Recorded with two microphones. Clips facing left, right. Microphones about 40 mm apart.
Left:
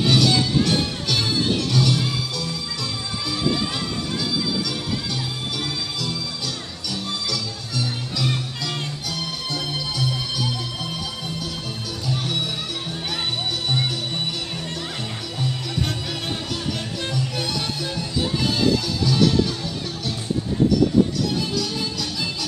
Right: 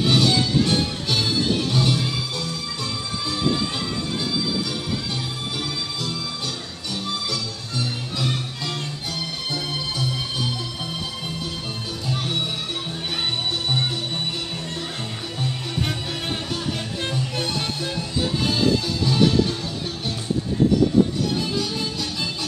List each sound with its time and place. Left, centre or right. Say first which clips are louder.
0.1 s music: even; right
17.1 s music: left 1 dB; right
19.0 s music: even; right